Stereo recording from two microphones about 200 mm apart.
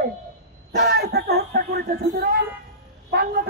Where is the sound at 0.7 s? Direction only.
50° right (ahead or behind).